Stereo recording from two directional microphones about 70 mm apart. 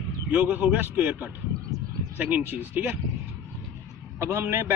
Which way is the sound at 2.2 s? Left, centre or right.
Right.